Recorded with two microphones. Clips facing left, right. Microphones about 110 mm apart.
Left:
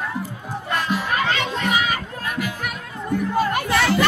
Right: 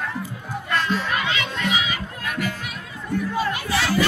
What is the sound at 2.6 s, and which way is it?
Music, 50° left (ahead or behind).